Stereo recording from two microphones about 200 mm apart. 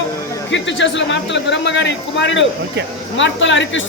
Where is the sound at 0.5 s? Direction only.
65° left (ahead or behind).